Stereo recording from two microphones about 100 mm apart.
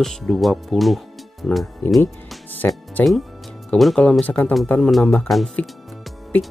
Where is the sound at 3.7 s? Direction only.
5° left (ahead or behind).